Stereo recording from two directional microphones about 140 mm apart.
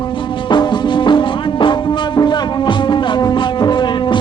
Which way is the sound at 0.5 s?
30° left (ahead or behind).